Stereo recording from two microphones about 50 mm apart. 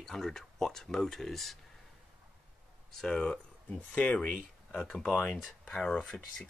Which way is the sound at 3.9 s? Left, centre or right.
Left.